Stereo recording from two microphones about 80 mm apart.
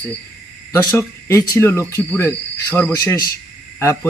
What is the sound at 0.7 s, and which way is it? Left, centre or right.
Speech, left.